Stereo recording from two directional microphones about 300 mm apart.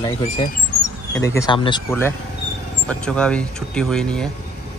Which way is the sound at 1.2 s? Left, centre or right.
Centre.